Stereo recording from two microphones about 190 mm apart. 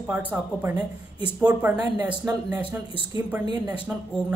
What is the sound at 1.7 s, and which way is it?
Speech, 20° right (ahead or behind).